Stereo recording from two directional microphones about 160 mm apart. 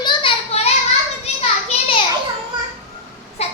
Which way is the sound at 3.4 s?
40° left (ahead or behind).